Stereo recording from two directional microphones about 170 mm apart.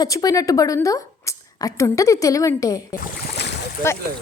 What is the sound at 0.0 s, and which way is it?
A woman's voice, 20° left (ahead or behind).